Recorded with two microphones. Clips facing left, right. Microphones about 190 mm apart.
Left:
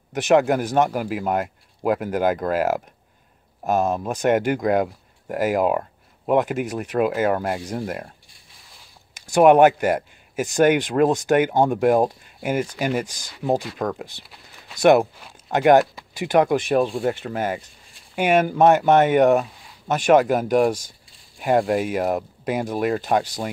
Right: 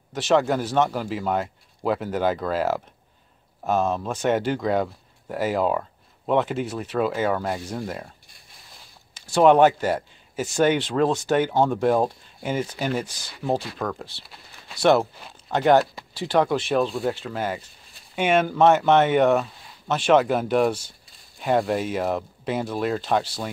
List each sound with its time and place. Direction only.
0.1 s speech: 15° left (ahead or behind)
9.3 s speech: 10° left (ahead or behind)